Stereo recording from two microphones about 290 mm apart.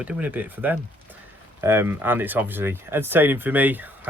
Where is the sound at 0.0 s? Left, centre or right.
Centre.